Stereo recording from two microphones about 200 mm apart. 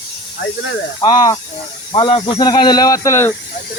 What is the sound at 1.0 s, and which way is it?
Speech, 20° left (ahead or behind).